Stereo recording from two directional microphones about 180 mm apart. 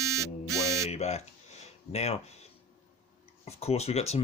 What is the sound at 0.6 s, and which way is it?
Speech, 15° right (ahead or behind).